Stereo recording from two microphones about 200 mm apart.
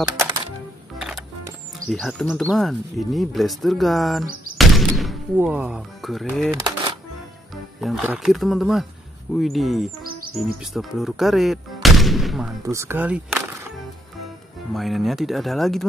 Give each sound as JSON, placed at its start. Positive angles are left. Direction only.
{"t": 0.9, "sound": "music", "side_deg": 0}
{"t": 1.9, "sound": "speech", "side_deg": 0}
{"t": 4.6, "sound": "gunshot", "side_deg": 0}
{"t": 6.5, "sound": "a sound", "side_deg": -20}
{"t": 7.8, "sound": "speech", "side_deg": -5}
{"t": 12.6, "sound": "speech", "side_deg": -15}
{"t": 14.7, "sound": "speech", "side_deg": 0}